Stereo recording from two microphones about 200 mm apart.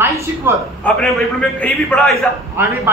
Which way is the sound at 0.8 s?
5° left (ahead or behind).